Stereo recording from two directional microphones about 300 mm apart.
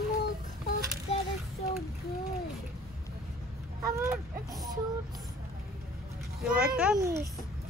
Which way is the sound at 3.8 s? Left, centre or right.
Centre.